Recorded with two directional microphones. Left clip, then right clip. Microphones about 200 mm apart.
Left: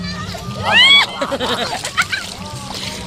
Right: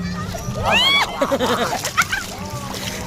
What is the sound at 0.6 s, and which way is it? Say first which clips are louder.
Speech: left 6 dB; 15° right (ahead or behind).